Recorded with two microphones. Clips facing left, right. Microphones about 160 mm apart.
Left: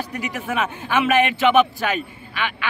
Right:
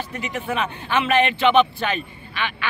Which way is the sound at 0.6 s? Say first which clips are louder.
Left 3 dB; 10° left (ahead or behind).